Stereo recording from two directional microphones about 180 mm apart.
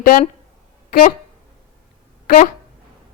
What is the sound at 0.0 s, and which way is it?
Speech, 50° left (ahead or behind).